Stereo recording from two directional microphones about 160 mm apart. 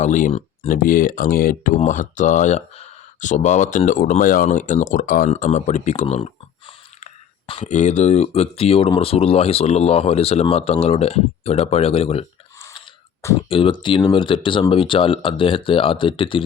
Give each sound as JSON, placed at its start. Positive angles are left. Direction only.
{"t": 0.0, "sound": "speech", "side_deg": 50}
{"t": 0.7, "sound": "speech", "side_deg": 60}
{"t": 1.8, "sound": "speech", "side_deg": 50}
{"t": 5.3, "sound": "speech", "side_deg": 45}
{"t": 7.6, "sound": "speech", "side_deg": 50}
{"t": 13.5, "sound": "speech", "side_deg": 35}